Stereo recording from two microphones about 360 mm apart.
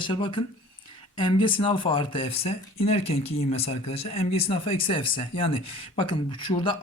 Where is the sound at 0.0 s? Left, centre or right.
Centre.